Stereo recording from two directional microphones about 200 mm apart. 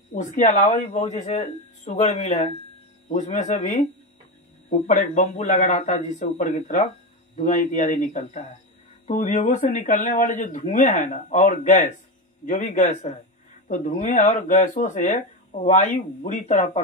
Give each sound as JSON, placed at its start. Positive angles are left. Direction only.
{"t": 0.1, "sound": "speech", "side_deg": 40}
{"t": 4.8, "sound": "speech", "side_deg": 40}